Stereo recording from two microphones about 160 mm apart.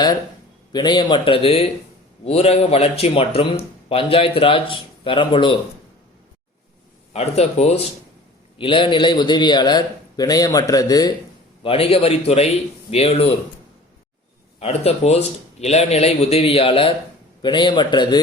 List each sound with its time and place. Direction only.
0.7 s speech: 25° left (ahead or behind)
7.1 s a man's voice: 40° left (ahead or behind); by 11.1 s 25° left (ahead or behind)
11.6 s speech: 35° left (ahead or behind)
14.6 s a man's voice: 40° left (ahead or behind)